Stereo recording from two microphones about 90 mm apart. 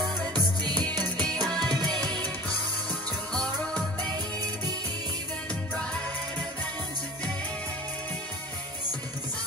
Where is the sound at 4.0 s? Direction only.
50° right (ahead or behind).